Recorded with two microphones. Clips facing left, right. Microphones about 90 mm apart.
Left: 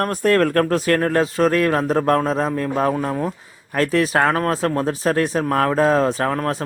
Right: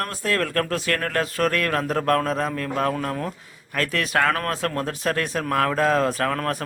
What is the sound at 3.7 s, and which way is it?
Speech, 35° left (ahead or behind).